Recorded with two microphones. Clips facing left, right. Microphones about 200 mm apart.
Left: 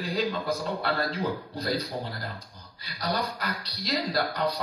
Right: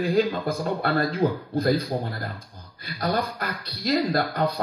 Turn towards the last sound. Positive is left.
turn(degrees=-50)  # may be behind; listen again after turning